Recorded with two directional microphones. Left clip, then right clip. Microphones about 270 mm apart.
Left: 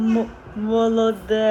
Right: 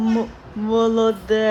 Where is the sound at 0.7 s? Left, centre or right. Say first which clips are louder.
Right 1 dB; centre.